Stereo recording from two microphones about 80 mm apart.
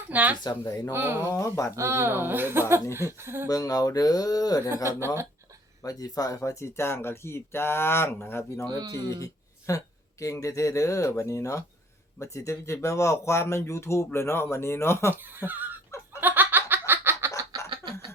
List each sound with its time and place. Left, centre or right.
0.1 s speech: right
1.3 s speech: left
1.7 s speech: right
3.5 s speech: left
4.9 s speech: right
5.8 s speech: left
8.8 s speech: right
9.2 s speech: left
15.1 s speech: right
16.2 s snicker: right